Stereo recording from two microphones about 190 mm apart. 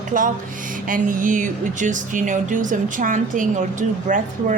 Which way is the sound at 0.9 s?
45° right (ahead or behind).